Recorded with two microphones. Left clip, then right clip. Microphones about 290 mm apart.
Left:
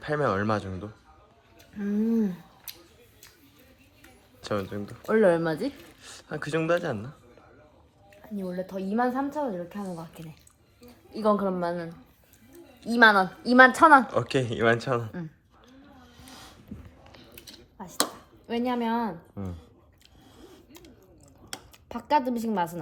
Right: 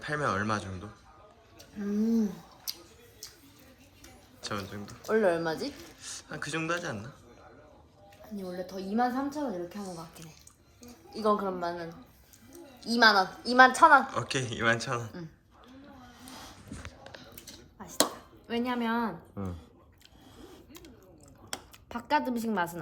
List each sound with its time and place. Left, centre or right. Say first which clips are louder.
0.0 s speech: left 4 dB; centre
4.4 s speech: left 6 dB; centre
5.0 s a woman's voice: left 5 dB; left
6.0 s speech: left 3 dB; centre
8.4 s a woman's voice: left 4 dB; left
14.1 s speech: left 6 dB; centre
17.8 s speech: even; centre
20.4 s a sound: even; centre
21.5 s speech: left 1 dB; centre